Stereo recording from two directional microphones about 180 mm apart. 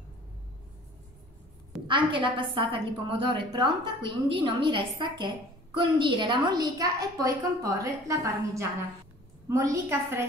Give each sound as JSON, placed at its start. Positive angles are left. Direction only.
{"t": 1.9, "sound": "a woman's voice", "side_deg": -25}